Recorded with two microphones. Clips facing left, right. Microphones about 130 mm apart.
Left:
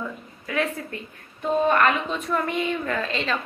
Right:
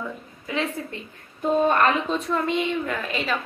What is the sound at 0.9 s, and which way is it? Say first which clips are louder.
A woman's voice: left 1 dB; 25° right (ahead or behind).